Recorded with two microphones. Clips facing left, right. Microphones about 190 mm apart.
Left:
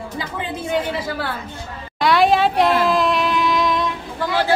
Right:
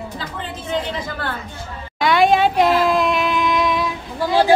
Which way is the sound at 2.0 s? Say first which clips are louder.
Right 1 dB; centre (ahead or behind).